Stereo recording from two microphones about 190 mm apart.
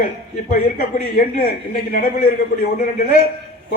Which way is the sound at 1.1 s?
50° left (ahead or behind).